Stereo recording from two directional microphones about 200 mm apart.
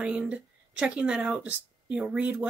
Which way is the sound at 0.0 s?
5° right (ahead or behind).